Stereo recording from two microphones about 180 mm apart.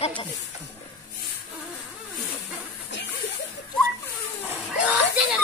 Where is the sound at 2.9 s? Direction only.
80° left.